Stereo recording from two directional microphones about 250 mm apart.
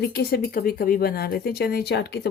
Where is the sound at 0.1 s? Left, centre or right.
Left.